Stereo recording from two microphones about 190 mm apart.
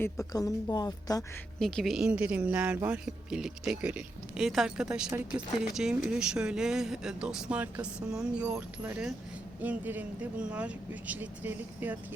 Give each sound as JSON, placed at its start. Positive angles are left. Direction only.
{"t": 0.0, "sound": "a woman's voice", "side_deg": 15}
{"t": 1.5, "sound": "speech", "side_deg": 5}